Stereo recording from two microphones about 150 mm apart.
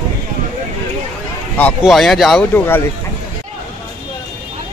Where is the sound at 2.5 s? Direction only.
15° left (ahead or behind).